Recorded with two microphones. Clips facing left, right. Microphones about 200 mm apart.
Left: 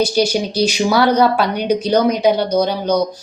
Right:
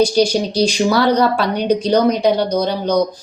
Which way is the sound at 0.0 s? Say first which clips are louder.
Right 2 dB; 5° left (ahead or behind).